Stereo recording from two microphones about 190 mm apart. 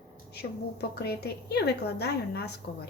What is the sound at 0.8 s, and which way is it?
A woman's voice, 55° left (ahead or behind).